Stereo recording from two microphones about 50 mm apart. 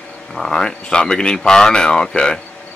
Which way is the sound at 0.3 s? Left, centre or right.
Centre.